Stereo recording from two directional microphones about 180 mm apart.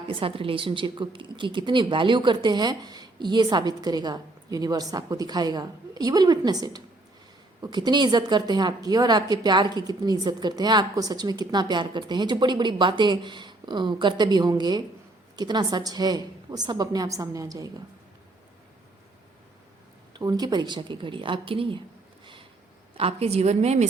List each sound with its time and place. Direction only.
0.1 s a woman's voice: 30° right (ahead or behind)
20.1 s a woman's voice: 20° right (ahead or behind)
23.0 s a woman's voice: 35° right (ahead or behind)